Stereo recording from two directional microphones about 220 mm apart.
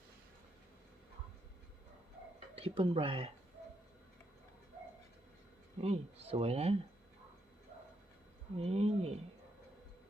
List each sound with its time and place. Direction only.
2.6 s speech: 25° right (ahead or behind)
5.8 s speech: 30° right (ahead or behind)
8.5 s speech: 30° right (ahead or behind)